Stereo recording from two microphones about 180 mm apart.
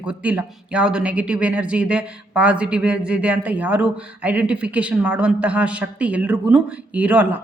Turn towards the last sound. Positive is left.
turn(degrees=-10)  # may be behind; listen again after turning